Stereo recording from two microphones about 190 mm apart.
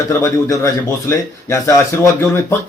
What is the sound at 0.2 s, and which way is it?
A man's voice, 15° left (ahead or behind).